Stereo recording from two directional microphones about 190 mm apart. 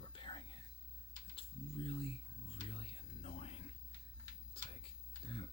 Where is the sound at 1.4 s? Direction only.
30° left (ahead or behind).